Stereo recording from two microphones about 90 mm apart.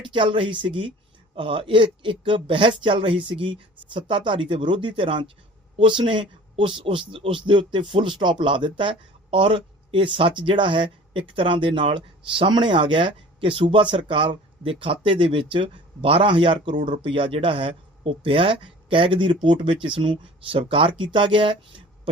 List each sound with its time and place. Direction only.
0.1 s speech: 70° right (ahead or behind)
6.0 s speech: 65° right (ahead or behind); by 20.9 s 85° right
21.0 s speech: 65° right (ahead or behind)